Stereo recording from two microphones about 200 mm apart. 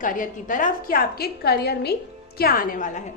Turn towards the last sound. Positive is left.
turn(degrees=40)  # may be behind; listen again after turning